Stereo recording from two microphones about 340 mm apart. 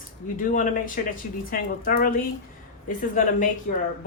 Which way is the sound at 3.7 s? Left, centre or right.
Left.